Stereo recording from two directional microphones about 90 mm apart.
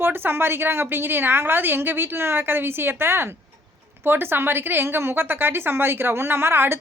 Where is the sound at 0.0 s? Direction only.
25° right (ahead or behind).